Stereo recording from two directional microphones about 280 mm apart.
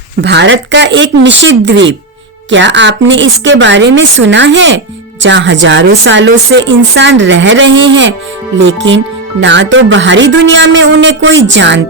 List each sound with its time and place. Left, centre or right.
0.2 s a woman's voice: right